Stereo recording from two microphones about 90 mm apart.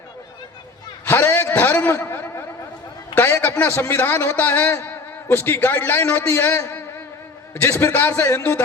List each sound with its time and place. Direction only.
1.0 s a man's voice: 25° left (ahead or behind)
2.0 s a sound: 25° left (ahead or behind)
3.2 s a man's voice: 30° left (ahead or behind)
8.2 s a man's voice: 35° left (ahead or behind)